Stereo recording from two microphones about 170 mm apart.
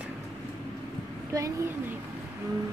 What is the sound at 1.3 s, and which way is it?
Speech, 20° right (ahead or behind).